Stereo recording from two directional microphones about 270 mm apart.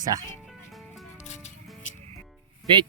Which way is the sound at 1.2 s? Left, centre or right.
Left.